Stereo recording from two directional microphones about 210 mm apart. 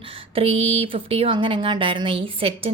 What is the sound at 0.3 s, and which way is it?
Speech, 25° right (ahead or behind).